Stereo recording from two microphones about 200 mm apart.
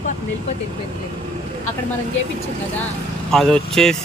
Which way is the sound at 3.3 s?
Centre (ahead or behind).